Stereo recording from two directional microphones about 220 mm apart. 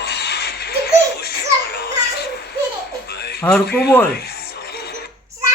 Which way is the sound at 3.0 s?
45° left (ahead or behind).